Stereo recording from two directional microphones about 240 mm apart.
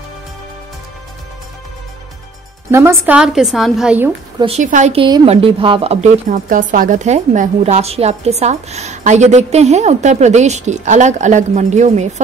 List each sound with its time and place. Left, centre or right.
2.7 s a woman's voice: centre
4.4 s a woman's voice: right